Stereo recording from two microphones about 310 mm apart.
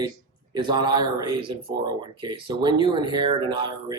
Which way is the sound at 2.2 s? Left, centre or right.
Centre.